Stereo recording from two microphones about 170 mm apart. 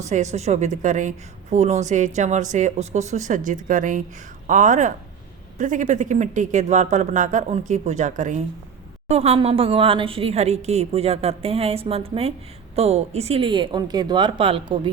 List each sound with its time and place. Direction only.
0.1 s a woman's voice: 40° right (ahead or behind)